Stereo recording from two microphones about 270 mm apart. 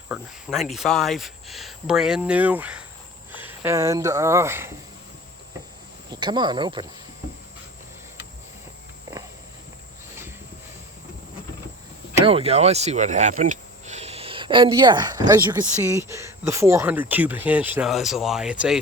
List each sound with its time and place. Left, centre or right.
0.1 s speech: centre
6.1 s speech: centre
12.2 s speech: right; by 18.8 s centre